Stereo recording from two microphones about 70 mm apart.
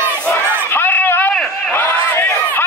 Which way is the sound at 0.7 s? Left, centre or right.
Left.